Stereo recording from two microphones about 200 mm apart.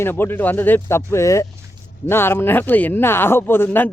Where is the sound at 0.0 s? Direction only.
10° left (ahead or behind).